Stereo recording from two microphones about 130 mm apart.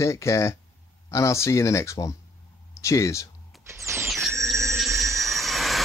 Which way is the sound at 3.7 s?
20° right (ahead or behind).